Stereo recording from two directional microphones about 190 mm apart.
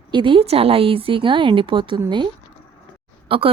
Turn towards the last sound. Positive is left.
turn(degrees=-30)  # may be behind; listen again after turning